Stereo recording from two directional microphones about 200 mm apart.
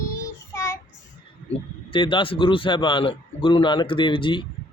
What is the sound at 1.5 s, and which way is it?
A man's voice, 25° left (ahead or behind).